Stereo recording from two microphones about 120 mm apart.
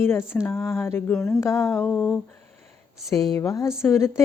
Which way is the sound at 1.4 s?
25° left (ahead or behind).